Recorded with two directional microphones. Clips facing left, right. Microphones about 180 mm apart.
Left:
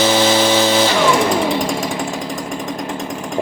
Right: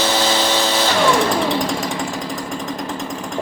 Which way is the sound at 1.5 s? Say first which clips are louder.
Left 1 dB; centre (ahead or behind).